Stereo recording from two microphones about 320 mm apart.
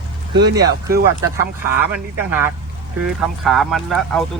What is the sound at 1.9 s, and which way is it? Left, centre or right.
Speech, centre.